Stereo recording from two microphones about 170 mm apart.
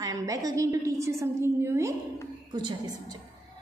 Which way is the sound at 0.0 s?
20° right (ahead or behind).